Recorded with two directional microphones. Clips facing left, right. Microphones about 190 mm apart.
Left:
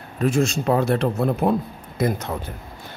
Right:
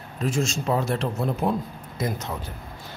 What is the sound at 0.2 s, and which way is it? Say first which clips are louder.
Speech: left 6 dB; 60° left (ahead or behind).